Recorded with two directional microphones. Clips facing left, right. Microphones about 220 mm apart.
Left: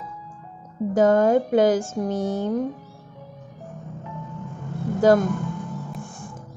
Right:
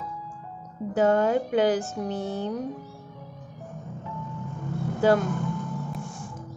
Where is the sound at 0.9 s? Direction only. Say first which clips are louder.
Left 4 dB; 45° left (ahead or behind).